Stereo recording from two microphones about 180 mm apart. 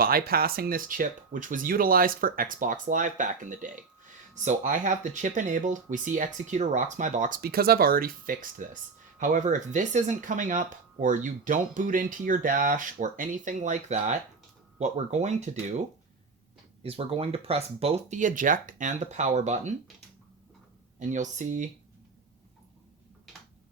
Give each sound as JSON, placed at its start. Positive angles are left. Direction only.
{"t": 0.0, "sound": "speech", "side_deg": -55}
{"t": 16.8, "sound": "speech", "side_deg": -35}
{"t": 21.0, "sound": "speech", "side_deg": -45}